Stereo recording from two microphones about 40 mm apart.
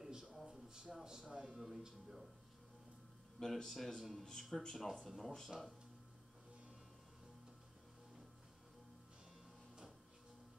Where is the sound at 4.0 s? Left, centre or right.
Centre.